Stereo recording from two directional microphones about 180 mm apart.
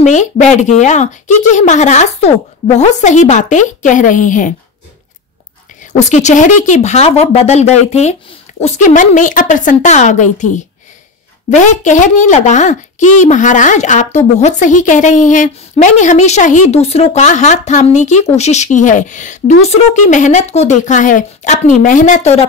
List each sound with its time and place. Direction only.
0.0 s a woman's voice: 40° left (ahead or behind)
5.9 s a woman's voice: 40° left (ahead or behind)